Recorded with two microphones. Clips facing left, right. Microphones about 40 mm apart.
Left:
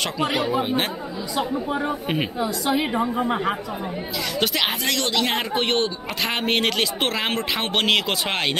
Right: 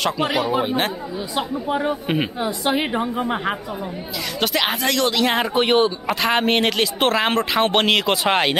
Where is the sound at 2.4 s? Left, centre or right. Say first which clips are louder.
Left 1 dB; right.